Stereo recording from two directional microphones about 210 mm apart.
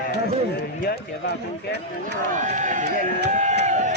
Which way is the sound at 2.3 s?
35° right (ahead or behind).